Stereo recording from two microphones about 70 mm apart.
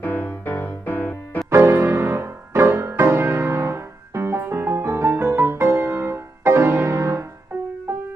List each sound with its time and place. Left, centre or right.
0.0 s music: left
1.5 s music: right